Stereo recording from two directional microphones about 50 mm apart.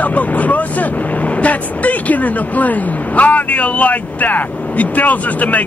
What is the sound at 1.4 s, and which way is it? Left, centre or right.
Speech, left.